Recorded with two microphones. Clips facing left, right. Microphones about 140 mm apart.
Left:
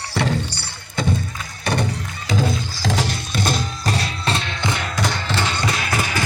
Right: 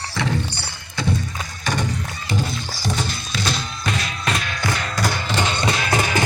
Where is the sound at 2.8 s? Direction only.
90° left; by 4.8 s 20° left (ahead or behind).